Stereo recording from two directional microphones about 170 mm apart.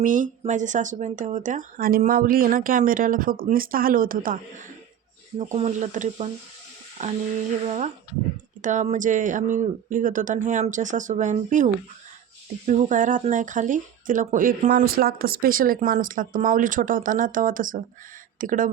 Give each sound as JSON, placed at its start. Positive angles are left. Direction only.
{"t": 0.0, "sound": "speech", "side_deg": -50}
{"t": 5.4, "sound": "speech", "side_deg": -40}
{"t": 8.6, "sound": "speech", "side_deg": -45}